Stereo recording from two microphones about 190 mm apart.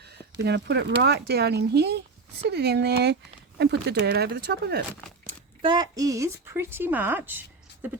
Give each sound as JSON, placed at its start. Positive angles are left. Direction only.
{"t": 0.0, "sound": "speech", "side_deg": -60}
{"t": 5.6, "sound": "speech", "side_deg": -25}